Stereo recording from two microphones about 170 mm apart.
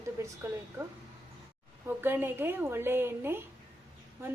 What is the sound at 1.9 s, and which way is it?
A woman's voice, 10° right (ahead or behind).